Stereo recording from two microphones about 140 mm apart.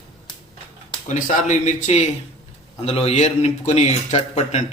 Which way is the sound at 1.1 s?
55° left (ahead or behind).